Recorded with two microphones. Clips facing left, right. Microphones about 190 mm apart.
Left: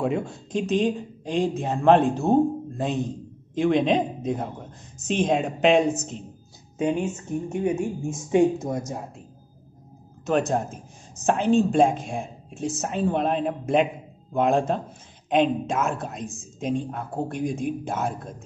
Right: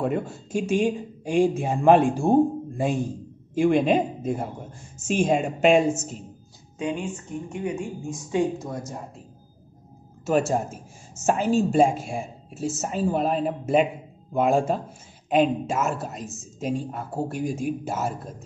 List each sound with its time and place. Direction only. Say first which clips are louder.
0.0 s a man's voice: even; 5° right (ahead or behind)
7.0 s speech: left 4 dB; 25° left (ahead or behind)
10.2 s a man's voice: right 1 dB; 5° right (ahead or behind)